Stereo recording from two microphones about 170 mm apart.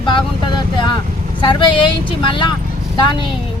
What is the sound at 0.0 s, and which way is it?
Vehicle, 30° left (ahead or behind).